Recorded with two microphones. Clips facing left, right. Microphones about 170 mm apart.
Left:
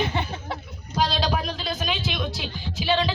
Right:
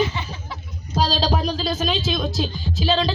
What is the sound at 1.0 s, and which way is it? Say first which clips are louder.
Music: right 3 dB; 35° right (ahead or behind).